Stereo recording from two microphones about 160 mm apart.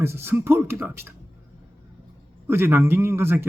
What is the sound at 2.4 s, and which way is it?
A man's voice, 15° right (ahead or behind).